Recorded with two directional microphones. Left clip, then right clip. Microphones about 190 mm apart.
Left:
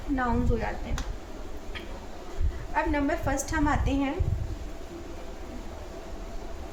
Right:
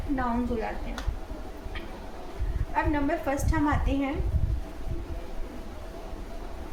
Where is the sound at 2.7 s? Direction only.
40° left (ahead or behind).